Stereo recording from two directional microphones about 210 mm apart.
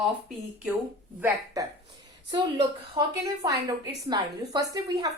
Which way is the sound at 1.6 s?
15° right (ahead or behind).